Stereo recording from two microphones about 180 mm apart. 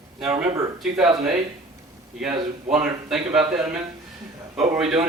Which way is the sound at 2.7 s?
Centre (ahead or behind).